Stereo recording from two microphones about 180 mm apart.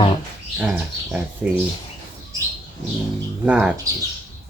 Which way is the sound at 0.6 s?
5° right (ahead or behind).